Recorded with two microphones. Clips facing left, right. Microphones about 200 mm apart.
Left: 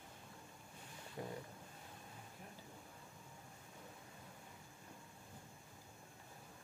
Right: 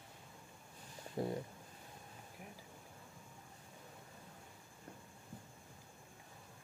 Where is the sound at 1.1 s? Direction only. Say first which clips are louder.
Right 8 dB; 35° right (ahead or behind).